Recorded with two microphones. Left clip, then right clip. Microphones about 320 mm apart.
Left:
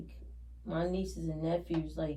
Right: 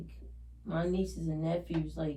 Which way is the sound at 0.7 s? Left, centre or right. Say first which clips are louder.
Right 1 dB; centre.